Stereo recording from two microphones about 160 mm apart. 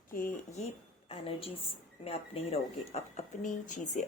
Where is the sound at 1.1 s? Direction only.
35° left (ahead or behind); by 4.0 s 50° left (ahead or behind).